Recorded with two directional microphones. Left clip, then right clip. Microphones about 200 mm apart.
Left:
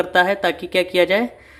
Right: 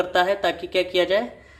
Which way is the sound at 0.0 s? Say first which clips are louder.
Left 3 dB; 35° left (ahead or behind).